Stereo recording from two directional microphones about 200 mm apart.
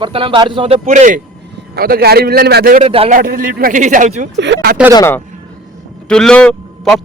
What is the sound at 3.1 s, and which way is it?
A man's voice, 45° right (ahead or behind).